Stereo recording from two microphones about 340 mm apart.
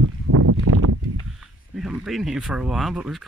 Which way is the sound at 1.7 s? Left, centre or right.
Centre.